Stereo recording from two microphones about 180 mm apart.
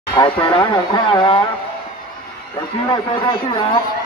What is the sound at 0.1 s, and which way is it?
Speech, 25° left (ahead or behind).